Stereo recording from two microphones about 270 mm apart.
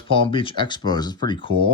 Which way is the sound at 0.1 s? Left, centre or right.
Centre.